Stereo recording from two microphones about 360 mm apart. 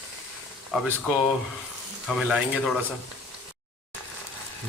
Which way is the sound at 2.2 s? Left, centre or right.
Centre.